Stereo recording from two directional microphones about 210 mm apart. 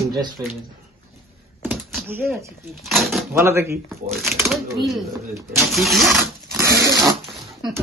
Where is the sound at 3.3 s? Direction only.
10° right (ahead or behind).